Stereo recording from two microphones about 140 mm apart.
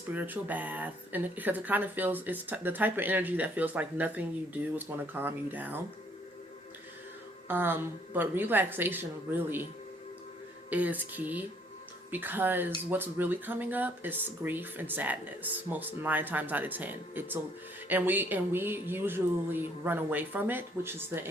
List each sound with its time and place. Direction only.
0.1 s speech: 10° right (ahead or behind)
7.4 s speech: 15° right (ahead or behind)
10.7 s speech: 10° right (ahead or behind)